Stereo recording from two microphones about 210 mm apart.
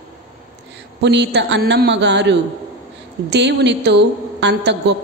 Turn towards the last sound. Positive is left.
turn(degrees=-55)  # may be behind; listen again after turning